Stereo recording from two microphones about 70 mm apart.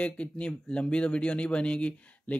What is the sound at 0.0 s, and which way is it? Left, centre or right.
Speech, centre.